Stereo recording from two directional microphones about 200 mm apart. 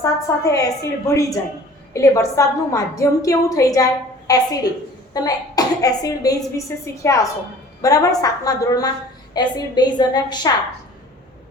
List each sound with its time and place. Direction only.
0.0 s a woman's voice: 15° left (ahead or behind)